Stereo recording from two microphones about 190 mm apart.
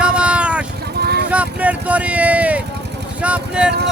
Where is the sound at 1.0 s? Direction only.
55° right (ahead or behind).